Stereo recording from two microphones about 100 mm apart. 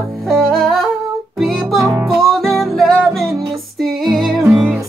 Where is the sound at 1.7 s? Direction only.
30° right (ahead or behind).